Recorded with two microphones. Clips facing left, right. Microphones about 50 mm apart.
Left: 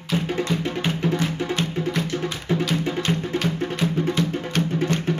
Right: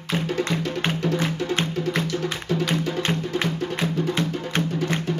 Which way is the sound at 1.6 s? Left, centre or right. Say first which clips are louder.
Even; right.